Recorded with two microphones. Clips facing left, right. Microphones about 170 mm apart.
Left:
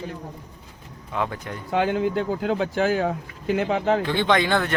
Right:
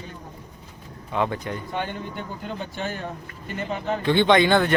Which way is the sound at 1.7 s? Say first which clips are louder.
Left 13 dB; 90° left.